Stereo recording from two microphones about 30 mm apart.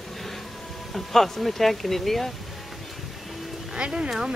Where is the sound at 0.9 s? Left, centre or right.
Centre.